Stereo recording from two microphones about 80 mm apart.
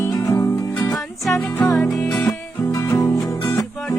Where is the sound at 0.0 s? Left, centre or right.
Left.